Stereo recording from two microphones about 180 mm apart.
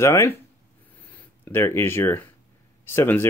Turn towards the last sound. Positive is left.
turn(degrees=15)  # may be behind; listen again after turning